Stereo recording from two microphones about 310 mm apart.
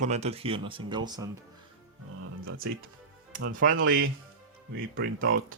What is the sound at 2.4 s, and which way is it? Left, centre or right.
Speech, right.